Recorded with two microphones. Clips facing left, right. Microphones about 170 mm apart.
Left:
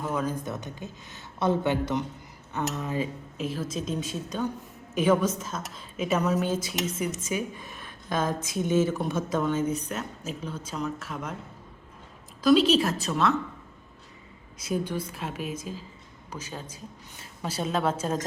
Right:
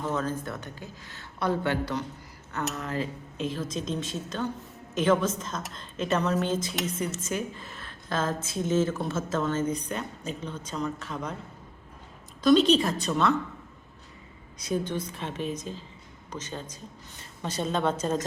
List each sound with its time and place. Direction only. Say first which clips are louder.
0.0 s a woman's voice: even; 10° left (ahead or behind)
3.3 s a woman's voice: even; 5° left (ahead or behind)
12.4 s a woman's voice: even; 5° left (ahead or behind)
14.6 s a woman's voice: even; 10° left (ahead or behind)